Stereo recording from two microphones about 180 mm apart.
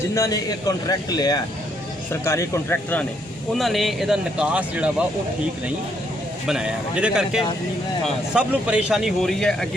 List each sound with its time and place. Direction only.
0.1 s a man's voice: 20° left (ahead or behind)
3.5 s speech: centre (ahead or behind)
6.5 s speech: 5° right (ahead or behind)